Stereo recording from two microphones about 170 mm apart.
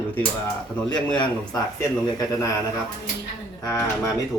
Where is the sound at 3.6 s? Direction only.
20° left (ahead or behind).